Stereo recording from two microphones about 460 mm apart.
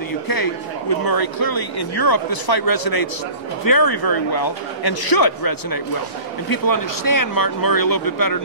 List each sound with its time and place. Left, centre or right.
0.3 s speech: left